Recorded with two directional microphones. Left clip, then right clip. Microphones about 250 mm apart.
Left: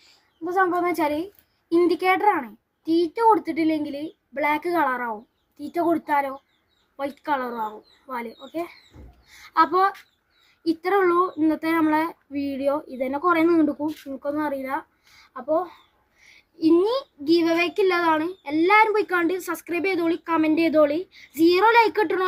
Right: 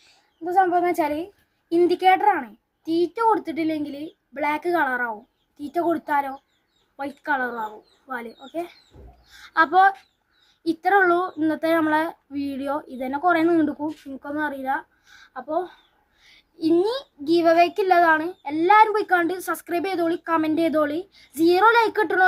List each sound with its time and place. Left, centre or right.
0.5 s speech: centre
16.2 s a woman's voice: centre